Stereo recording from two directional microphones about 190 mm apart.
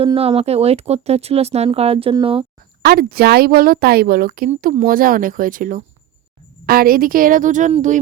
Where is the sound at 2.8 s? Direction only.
55° right (ahead or behind).